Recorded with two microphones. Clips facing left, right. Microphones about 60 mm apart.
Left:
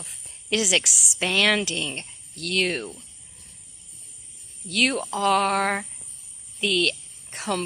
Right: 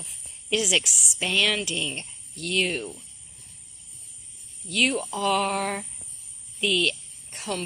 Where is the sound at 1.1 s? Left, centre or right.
Left.